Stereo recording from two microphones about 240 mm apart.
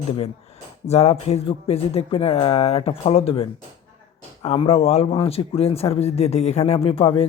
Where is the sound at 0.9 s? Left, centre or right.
Left.